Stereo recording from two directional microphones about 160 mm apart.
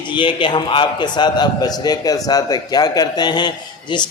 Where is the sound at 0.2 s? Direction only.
30° left (ahead or behind).